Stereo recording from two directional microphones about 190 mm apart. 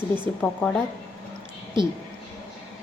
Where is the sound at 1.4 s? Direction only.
25° right (ahead or behind).